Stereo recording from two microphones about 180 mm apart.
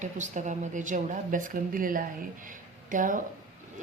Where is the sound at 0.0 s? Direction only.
40° right (ahead or behind).